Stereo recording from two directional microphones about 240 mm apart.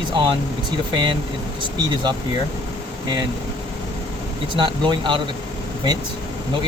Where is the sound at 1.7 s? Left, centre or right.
Centre.